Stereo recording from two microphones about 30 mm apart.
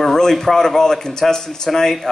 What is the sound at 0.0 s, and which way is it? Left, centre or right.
A man's voice, centre.